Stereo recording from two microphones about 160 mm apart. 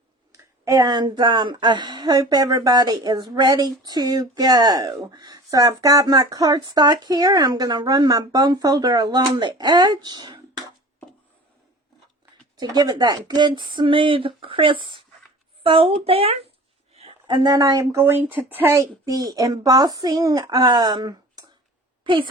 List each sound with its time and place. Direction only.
0.6 s a woman's voice: 20° right (ahead or behind)
12.5 s a woman's voice: 25° right (ahead or behind)